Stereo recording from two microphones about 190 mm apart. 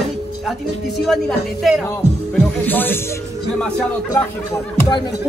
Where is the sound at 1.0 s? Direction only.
Centre (ahead or behind).